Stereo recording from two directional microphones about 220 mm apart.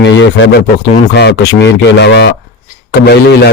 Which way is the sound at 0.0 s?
55° left (ahead or behind).